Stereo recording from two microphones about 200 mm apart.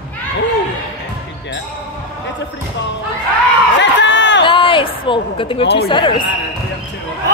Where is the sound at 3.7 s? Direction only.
65° left (ahead or behind).